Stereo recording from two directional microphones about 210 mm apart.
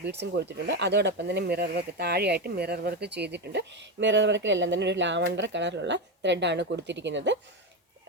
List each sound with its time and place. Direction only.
0.0 s speech: 55° right (ahead or behind)